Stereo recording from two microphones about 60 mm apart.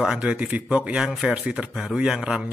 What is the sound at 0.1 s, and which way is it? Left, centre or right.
Mantra, centre.